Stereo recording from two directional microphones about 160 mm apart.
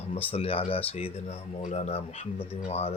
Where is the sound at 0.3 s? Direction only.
35° left (ahead or behind).